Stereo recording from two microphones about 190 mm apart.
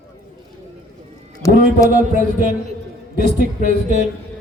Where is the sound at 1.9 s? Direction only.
45° right (ahead or behind).